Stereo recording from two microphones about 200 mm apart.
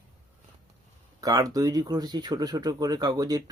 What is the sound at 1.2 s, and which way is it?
Speech, 20° right (ahead or behind).